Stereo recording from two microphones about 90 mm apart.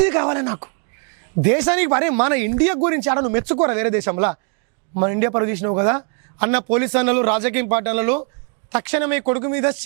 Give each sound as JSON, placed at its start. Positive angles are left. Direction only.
{"t": 0.0, "sound": "a man's voice", "side_deg": -15}